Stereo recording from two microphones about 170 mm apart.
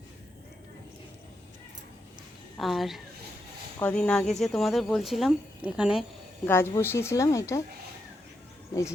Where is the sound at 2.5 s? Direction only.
Centre (ahead or behind).